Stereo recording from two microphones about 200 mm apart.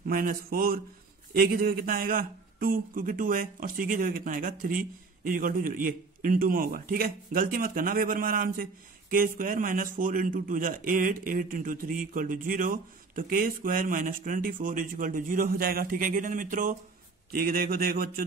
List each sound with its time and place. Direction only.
0.0 s a man's voice: 45° right (ahead or behind)